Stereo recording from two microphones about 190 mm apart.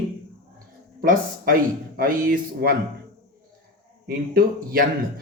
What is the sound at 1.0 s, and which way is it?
Speech, 45° right (ahead or behind).